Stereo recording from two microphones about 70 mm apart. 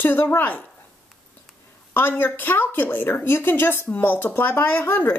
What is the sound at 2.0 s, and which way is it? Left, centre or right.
Speech, left.